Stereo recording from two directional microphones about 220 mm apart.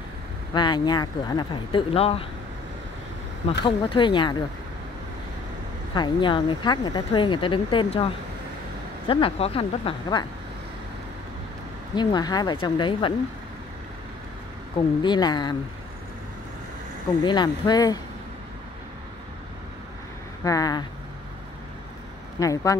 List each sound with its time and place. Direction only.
0.6 s speech: 20° left (ahead or behind)
3.4 s speech: 20° left (ahead or behind)
5.9 s speech: 20° left (ahead or behind)
11.9 s speech: 20° left (ahead or behind)
15.0 s speech: 20° left (ahead or behind)
17.2 s speech: 20° left (ahead or behind)
20.4 s speech: 15° left (ahead or behind)
22.4 s speech: 15° left (ahead or behind)